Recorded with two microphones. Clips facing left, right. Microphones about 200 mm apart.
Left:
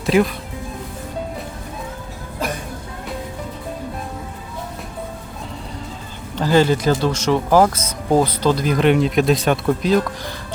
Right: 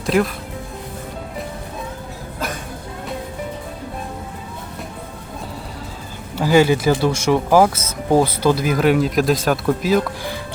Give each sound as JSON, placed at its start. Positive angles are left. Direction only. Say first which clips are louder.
{"t": 0.0, "sound": "speech", "louder": "left 2 dB", "side_deg": 0}
{"t": 6.3, "sound": "speech", "louder": "right 1 dB", "side_deg": -10}